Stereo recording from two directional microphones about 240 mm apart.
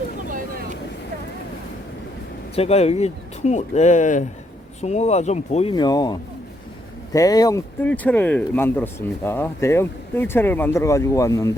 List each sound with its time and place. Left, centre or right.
0.3 s vehicle: right
2.6 s speech: left